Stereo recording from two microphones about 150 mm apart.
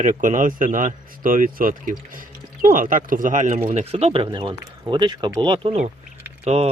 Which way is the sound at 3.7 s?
40° right (ahead or behind).